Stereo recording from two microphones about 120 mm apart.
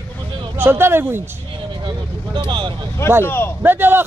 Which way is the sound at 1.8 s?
40° right (ahead or behind).